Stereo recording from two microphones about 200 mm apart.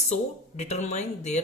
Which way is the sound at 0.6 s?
35° left (ahead or behind).